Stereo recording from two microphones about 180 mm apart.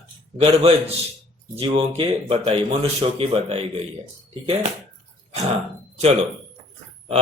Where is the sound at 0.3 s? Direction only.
30° right (ahead or behind).